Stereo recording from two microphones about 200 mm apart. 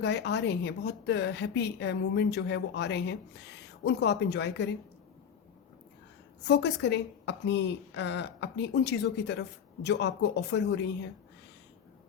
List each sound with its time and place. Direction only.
0.0 s a woman's voice: 60° left (ahead or behind)
6.4 s a woman's voice: 60° left (ahead or behind)